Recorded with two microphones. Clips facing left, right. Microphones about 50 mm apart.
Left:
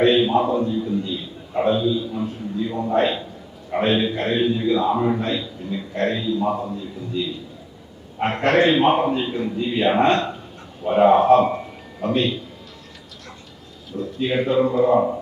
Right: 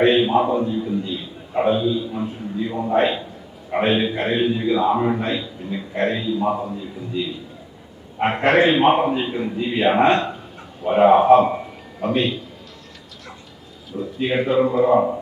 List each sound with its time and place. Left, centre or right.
0.0 s a sound: right
3.7 s a man's voice: centre
14.0 s speech: centre